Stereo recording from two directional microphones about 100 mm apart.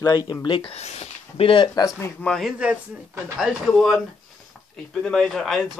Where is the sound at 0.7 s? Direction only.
90° left; by 1.7 s 70° left (ahead or behind).